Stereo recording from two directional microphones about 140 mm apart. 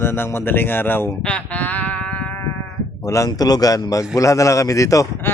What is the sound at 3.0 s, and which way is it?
A man's voice, 25° left (ahead or behind).